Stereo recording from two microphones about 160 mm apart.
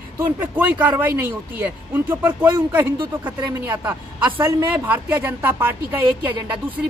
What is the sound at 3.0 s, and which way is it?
Speech, 25° right (ahead or behind).